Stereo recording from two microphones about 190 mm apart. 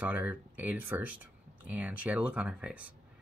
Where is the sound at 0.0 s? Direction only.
10° right (ahead or behind).